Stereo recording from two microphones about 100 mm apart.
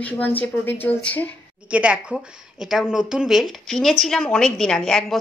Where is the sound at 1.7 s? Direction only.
10° right (ahead or behind).